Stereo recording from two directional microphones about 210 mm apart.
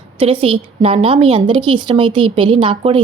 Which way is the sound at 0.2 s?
25° right (ahead or behind).